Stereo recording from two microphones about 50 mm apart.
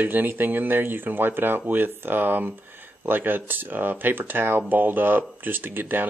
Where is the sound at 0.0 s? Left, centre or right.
Right.